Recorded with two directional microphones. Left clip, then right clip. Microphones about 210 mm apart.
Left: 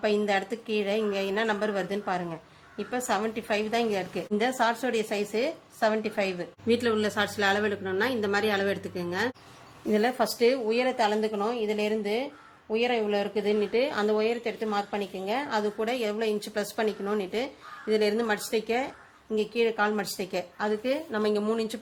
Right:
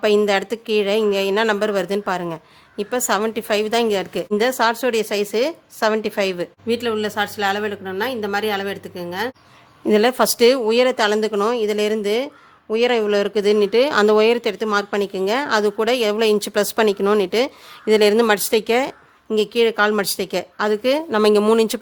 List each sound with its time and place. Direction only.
0.0 s speech: 45° right (ahead or behind)